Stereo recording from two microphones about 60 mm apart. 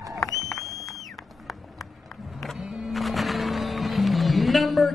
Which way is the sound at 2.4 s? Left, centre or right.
Centre.